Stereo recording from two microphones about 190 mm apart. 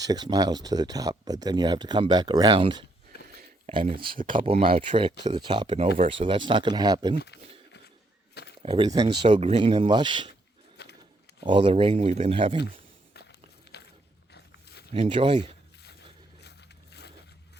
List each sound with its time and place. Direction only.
0.0 s speech: 20° right (ahead or behind)
4.1 s speech: 45° right (ahead or behind)
4.4 s speech: 30° right (ahead or behind)
8.6 s speech: 25° right (ahead or behind)
10.8 s a sound: 60° left (ahead or behind)
11.3 s speech: 25° right (ahead or behind)
13.7 s a sound: 60° left (ahead or behind)
14.9 s speech: 25° right (ahead or behind)
16.4 s a sound: 60° left (ahead or behind)